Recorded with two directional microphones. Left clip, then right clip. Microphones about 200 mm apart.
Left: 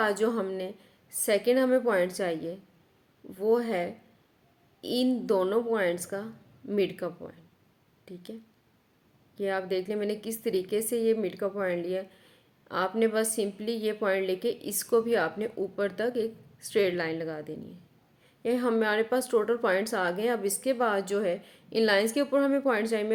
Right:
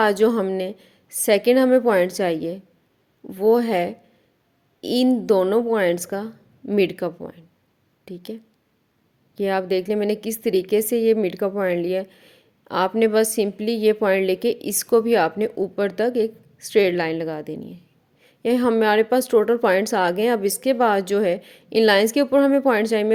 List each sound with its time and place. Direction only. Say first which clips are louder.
0.0 s a woman's voice: right 9 dB; 40° right (ahead or behind)